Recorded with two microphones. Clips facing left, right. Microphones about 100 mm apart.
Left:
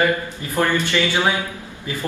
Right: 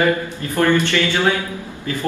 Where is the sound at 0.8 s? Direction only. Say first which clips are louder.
Right 2 dB; 15° left (ahead or behind).